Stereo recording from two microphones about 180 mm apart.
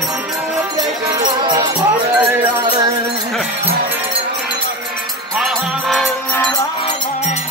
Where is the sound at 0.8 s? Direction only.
20° right (ahead or behind).